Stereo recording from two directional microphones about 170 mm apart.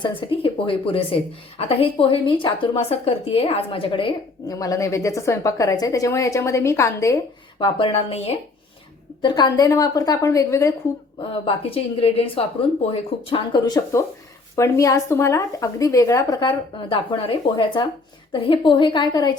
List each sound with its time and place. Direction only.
0.0 s a woman's voice: 30° left (ahead or behind)
4.5 s a woman's voice: 20° left (ahead or behind)
7.6 s a woman's voice: 30° left (ahead or behind)
9.2 s a woman's voice: 25° left (ahead or behind)
11.2 s a woman's voice: 35° left (ahead or behind)